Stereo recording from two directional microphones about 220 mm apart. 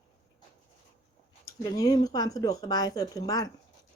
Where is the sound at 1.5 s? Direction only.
15° left (ahead or behind).